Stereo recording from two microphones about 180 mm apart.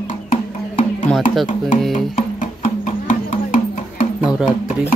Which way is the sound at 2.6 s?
45° left (ahead or behind).